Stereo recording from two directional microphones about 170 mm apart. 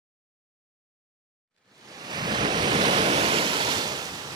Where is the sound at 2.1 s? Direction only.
25° right (ahead or behind).